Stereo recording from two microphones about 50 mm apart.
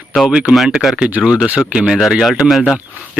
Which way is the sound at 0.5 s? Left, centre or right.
Centre.